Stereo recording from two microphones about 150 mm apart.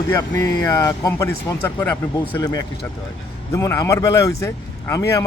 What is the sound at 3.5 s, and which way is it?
Speech, 20° left (ahead or behind).